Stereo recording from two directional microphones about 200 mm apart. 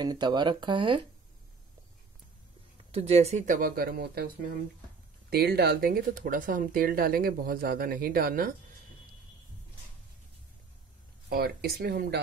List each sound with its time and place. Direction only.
0.0 s speech: 20° right (ahead or behind)
2.9 s speech: 30° right (ahead or behind)
11.2 s speech: 50° right (ahead or behind)